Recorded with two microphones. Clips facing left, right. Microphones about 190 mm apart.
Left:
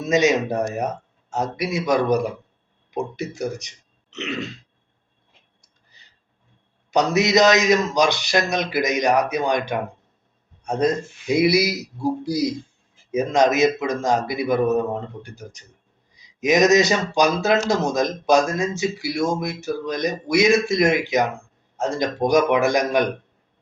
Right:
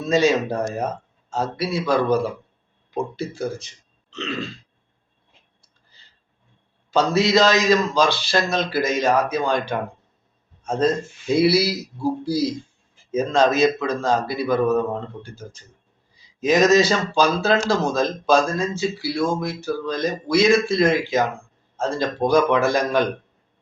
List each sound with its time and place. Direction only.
0.0 s a man's voice: 20° left (ahead or behind)
5.6 s a sound: 15° left (ahead or behind)
6.9 s a man's voice: 20° left (ahead or behind)